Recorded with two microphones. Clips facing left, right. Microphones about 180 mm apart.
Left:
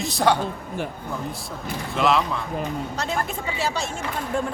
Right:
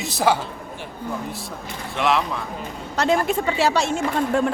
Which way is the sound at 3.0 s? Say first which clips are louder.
Right 12 dB; 85° right.